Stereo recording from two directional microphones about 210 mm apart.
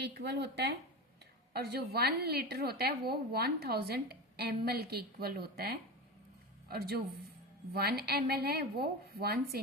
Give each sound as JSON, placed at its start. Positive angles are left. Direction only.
{"t": 0.0, "sound": "a woman's voice", "side_deg": -50}